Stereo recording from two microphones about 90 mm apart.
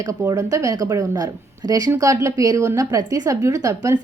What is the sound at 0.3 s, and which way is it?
A woman's voice, 35° right (ahead or behind).